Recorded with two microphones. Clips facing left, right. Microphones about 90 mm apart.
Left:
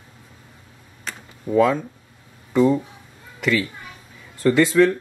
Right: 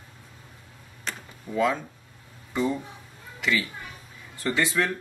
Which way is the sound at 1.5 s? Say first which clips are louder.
Left 7 dB; 50° left (ahead or behind).